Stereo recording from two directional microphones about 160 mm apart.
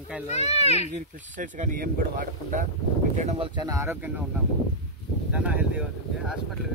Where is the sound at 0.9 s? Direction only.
55° right (ahead or behind).